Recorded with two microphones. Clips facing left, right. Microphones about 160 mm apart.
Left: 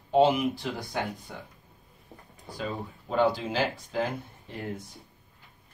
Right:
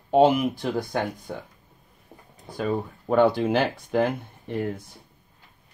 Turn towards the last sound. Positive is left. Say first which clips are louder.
# right 9 dB
turn(degrees=-60)  # may be behind; listen again after turning